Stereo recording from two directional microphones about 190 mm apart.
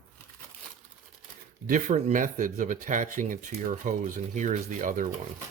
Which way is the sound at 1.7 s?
40° right (ahead or behind).